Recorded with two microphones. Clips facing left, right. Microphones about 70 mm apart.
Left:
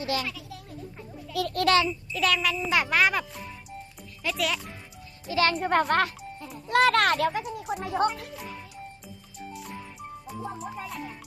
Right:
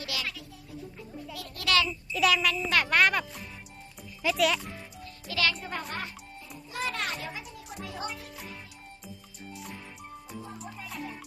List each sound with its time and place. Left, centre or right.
0.0 s speech: left
1.4 s a child's voice: left
1.6 s a child's voice: left
1.9 s child singing: centre
5.3 s speech: left
5.5 s a child's voice: left
7.7 s speech: left
9.5 s music: centre